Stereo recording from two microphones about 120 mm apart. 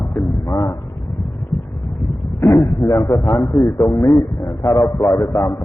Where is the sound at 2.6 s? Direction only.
45° left (ahead or behind).